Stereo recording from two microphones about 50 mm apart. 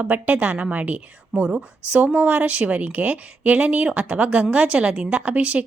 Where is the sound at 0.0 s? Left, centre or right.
Right.